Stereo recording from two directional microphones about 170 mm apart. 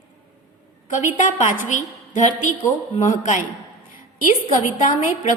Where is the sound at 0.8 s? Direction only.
45° left (ahead or behind).